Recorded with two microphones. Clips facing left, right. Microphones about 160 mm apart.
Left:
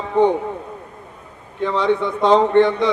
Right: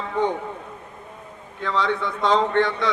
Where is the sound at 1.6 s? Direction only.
20° left (ahead or behind).